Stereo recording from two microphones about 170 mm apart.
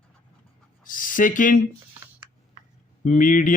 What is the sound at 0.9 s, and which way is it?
Speech, 55° left (ahead or behind).